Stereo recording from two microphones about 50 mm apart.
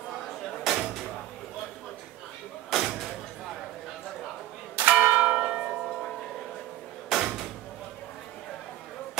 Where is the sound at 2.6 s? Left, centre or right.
Centre.